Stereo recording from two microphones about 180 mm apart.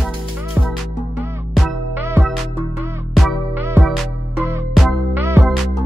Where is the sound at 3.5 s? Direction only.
15° right (ahead or behind).